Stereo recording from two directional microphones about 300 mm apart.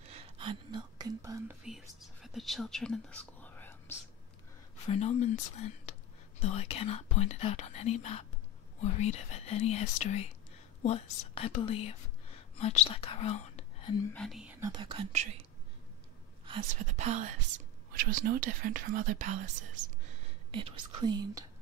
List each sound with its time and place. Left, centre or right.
0.1 s whispering: centre
4.8 s speech: left
14.1 s speech: centre
16.4 s speech: right
20.7 s speech: centre